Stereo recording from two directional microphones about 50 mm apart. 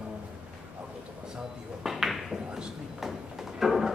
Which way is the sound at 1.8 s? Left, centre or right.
Centre.